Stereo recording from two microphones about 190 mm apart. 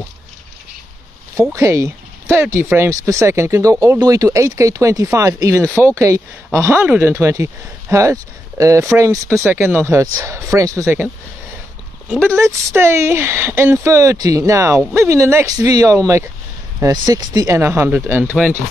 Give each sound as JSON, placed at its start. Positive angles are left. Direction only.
{"t": 1.3, "sound": "speech", "side_deg": -15}
{"t": 12.1, "sound": "speech", "side_deg": -10}